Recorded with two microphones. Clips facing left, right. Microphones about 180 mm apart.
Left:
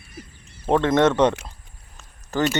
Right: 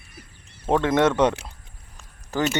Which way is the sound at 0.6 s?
10° right (ahead or behind).